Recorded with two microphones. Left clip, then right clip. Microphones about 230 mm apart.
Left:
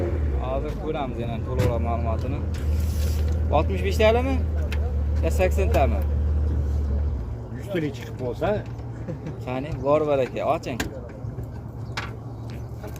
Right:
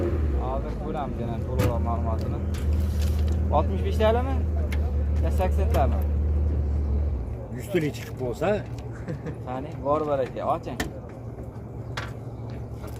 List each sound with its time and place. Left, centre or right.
0.4 s speech: left
3.5 s speech: left
7.7 s speech: right
9.5 s speech: left